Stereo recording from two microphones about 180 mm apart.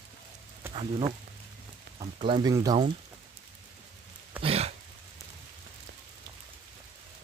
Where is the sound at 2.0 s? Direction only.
30° right (ahead or behind).